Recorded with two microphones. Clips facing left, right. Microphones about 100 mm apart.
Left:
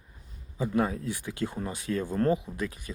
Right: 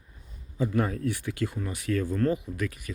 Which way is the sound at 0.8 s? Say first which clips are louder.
Left 1 dB; 15° left (ahead or behind).